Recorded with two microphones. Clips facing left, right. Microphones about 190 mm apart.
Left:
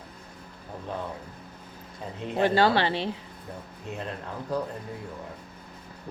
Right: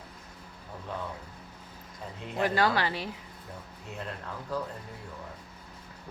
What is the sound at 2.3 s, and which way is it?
Speech, 30° left (ahead or behind).